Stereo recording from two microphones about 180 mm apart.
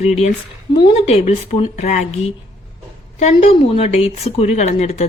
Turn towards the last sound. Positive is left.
turn(degrees=40)  # may be behind; listen again after turning